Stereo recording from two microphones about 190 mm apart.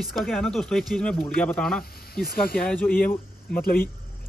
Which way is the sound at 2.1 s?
55° left (ahead or behind).